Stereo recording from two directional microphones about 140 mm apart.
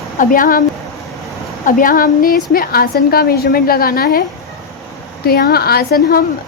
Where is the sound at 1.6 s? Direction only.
85° left.